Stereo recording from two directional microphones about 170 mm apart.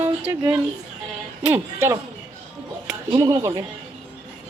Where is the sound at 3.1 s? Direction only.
20° right (ahead or behind).